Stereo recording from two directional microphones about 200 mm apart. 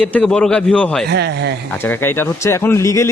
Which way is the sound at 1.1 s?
55° right (ahead or behind).